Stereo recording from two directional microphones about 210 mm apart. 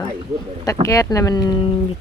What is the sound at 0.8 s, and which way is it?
Speech, 15° left (ahead or behind).